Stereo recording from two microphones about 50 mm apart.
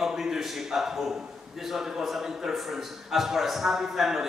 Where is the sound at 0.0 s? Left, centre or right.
Centre.